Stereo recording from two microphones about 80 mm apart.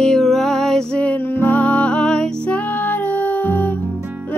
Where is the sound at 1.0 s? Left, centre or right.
Left.